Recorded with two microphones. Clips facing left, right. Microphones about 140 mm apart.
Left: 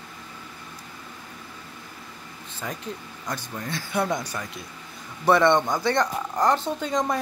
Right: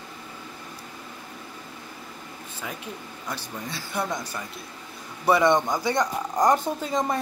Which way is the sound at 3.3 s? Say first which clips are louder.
Left 3 dB; 5° right (ahead or behind).